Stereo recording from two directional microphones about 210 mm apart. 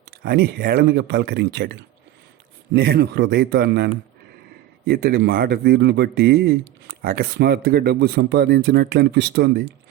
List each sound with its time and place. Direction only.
0.2 s speech: 50° right (ahead or behind)
4.9 s speech: 50° right (ahead or behind)